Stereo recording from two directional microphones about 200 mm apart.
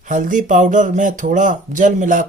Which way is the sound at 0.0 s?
40° right (ahead or behind).